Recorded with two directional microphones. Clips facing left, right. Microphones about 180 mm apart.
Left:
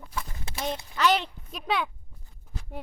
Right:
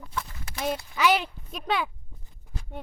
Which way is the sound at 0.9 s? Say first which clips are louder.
Even; 10° right (ahead or behind).